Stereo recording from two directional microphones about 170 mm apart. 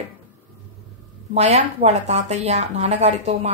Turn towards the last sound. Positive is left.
turn(degrees=-40)  # may be behind; listen again after turning